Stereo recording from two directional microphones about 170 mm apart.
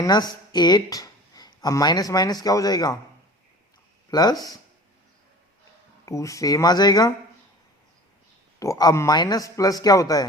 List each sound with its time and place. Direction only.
0.0 s speech: 25° left (ahead or behind)
4.1 s a man's voice: 25° left (ahead or behind)
6.1 s a man's voice: 20° left (ahead or behind)
8.5 s a man's voice: 20° left (ahead or behind)